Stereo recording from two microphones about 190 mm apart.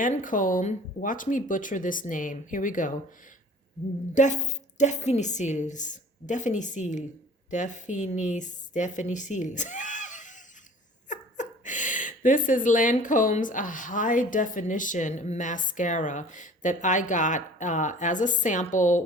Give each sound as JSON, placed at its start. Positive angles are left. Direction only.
{"t": 0.0, "sound": "speech", "side_deg": 45}
{"t": 4.1, "sound": "speech", "side_deg": 40}